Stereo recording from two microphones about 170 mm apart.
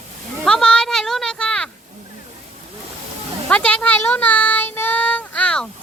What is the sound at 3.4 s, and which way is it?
Child singing, 5° left (ahead or behind).